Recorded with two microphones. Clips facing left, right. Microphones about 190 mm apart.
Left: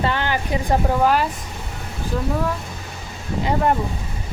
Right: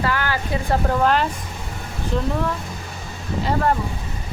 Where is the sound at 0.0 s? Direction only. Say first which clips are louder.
Left 1 dB; 25° left (ahead or behind); by 1.3 s 10° left (ahead or behind).